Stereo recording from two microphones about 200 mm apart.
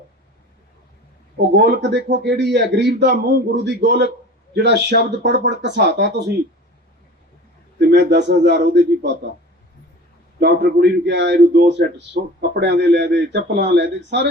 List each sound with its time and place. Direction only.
1.4 s a man's voice: 55° right (ahead or behind)
7.8 s a man's voice: 55° right (ahead or behind)
10.4 s a man's voice: 55° right (ahead or behind)